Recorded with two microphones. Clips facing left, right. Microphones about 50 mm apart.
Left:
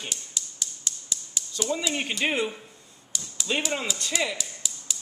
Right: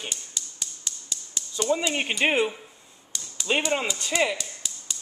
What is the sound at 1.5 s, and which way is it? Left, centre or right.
Speech, centre.